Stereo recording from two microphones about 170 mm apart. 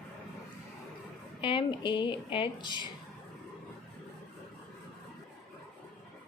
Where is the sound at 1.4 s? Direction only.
30° left (ahead or behind).